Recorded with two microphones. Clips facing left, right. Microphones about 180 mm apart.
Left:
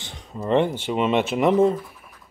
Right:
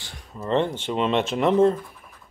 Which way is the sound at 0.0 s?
20° left (ahead or behind).